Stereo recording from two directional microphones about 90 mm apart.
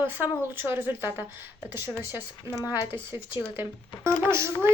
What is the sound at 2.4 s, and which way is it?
Speech, 40° left (ahead or behind).